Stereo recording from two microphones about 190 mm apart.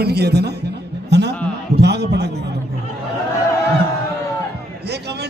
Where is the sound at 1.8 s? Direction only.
60° right (ahead or behind).